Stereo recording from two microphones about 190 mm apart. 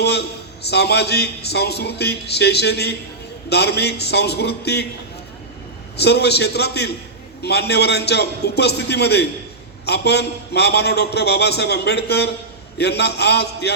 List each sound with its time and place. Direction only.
0.0 s a man's voice: 60° left (ahead or behind)
6.0 s a man's voice: 60° left (ahead or behind)